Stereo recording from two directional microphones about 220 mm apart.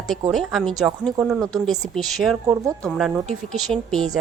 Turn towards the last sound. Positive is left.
turn(degrees=0)  # may be behind; listen again after turning